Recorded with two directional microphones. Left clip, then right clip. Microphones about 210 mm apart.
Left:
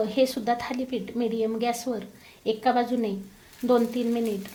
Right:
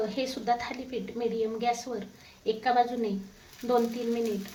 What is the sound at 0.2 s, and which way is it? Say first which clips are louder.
Speech: left 7 dB; 40° left (ahead or behind).